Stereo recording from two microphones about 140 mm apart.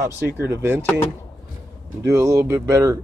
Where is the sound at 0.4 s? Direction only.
15° right (ahead or behind).